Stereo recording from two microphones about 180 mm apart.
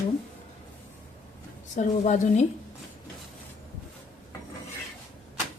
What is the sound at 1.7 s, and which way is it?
Speech, 40° left (ahead or behind).